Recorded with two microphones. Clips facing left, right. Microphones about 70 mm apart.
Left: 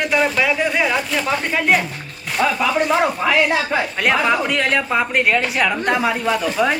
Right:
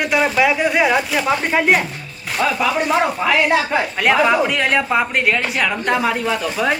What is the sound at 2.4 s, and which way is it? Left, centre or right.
Speech, centre.